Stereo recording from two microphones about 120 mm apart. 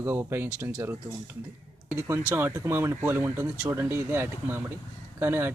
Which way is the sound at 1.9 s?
20° right (ahead or behind).